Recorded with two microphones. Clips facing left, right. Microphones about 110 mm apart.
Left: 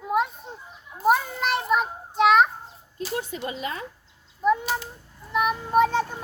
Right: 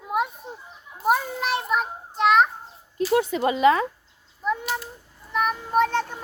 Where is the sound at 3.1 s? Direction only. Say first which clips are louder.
Right 10 dB; 90° right.